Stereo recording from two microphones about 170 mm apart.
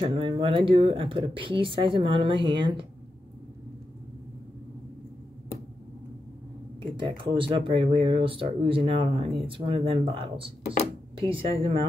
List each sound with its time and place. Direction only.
0.0 s speech: 30° right (ahead or behind)
6.8 s speech: 30° right (ahead or behind)